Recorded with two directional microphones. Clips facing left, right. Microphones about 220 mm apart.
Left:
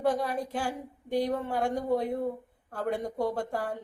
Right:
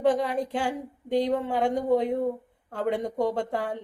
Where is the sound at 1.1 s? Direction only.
20° right (ahead or behind).